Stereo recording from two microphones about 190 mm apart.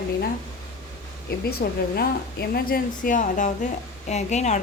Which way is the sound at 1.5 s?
55° left (ahead or behind).